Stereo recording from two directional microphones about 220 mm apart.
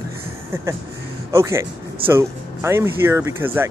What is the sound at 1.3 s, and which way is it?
Speech, 10° right (ahead or behind).